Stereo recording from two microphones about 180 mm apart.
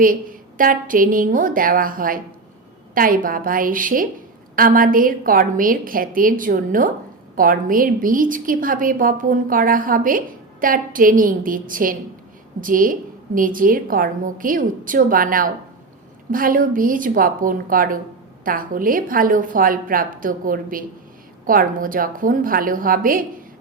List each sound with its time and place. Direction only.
0.0 s a woman's voice: 50° right (ahead or behind)